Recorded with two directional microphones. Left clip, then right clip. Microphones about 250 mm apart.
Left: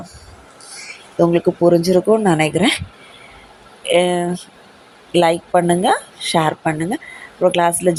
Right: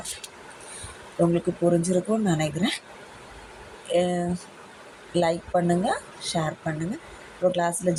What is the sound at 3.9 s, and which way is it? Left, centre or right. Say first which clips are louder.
Speech: left 9 dB; centre.